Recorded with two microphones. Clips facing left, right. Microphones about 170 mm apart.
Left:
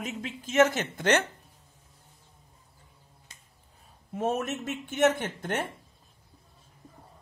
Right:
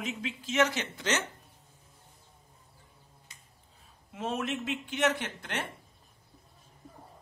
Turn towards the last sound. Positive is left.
turn(degrees=50)  # may be behind; listen again after turning